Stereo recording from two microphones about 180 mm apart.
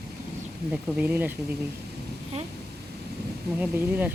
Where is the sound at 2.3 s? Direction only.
40° right (ahead or behind).